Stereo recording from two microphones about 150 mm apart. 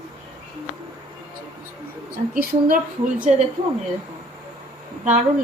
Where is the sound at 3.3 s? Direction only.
50° right (ahead or behind).